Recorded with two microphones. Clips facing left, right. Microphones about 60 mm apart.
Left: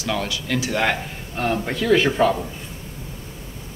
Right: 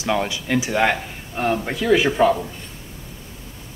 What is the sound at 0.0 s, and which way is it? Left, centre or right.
Speech, right.